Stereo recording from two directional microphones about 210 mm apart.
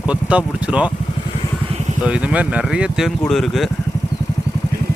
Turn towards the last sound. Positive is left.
turn(degrees=0)  # may be behind; listen again after turning